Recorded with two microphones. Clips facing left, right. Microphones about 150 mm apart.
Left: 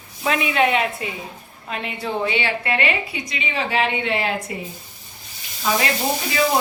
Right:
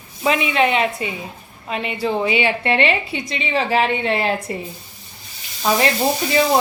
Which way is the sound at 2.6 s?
25° right (ahead or behind).